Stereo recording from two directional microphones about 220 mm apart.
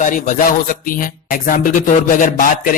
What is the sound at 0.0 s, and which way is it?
Music, 35° left (ahead or behind).